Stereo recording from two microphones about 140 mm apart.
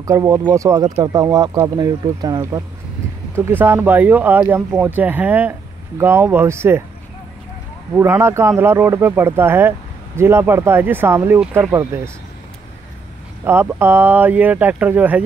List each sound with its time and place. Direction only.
0.0 s speech: 25° right (ahead or behind)
3.3 s speech: 15° right (ahead or behind)
7.9 s speech: 15° right (ahead or behind)
13.4 s speech: 15° right (ahead or behind)